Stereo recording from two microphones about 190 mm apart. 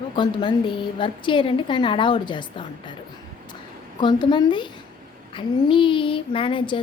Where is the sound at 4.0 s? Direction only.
25° left (ahead or behind).